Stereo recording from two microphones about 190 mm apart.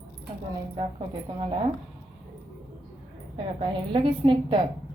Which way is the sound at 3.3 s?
25° right (ahead or behind).